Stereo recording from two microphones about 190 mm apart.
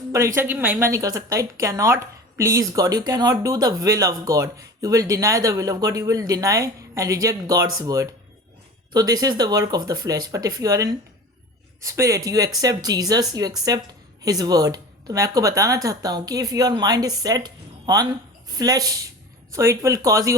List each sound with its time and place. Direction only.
0.1 s a woman's voice: 15° right (ahead or behind)